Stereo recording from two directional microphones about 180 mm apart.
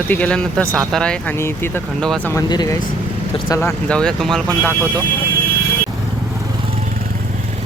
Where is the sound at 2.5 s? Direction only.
25° left (ahead or behind).